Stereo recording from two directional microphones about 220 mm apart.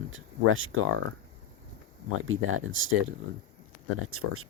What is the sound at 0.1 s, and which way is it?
Speech, 65° right (ahead or behind).